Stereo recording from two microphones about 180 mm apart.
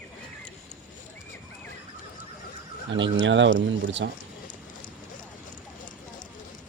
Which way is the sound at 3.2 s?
90° right.